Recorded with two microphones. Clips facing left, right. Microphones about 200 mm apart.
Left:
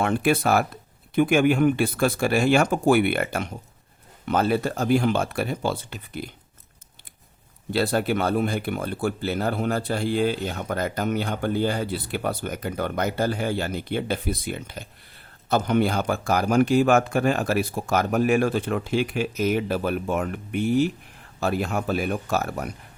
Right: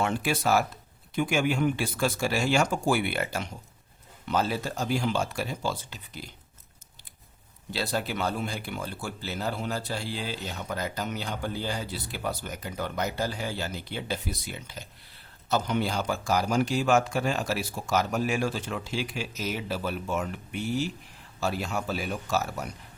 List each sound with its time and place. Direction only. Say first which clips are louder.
0.0 s speech: left 6 dB; 55° left (ahead or behind)
7.7 s speech: left 8 dB; 55° left (ahead or behind)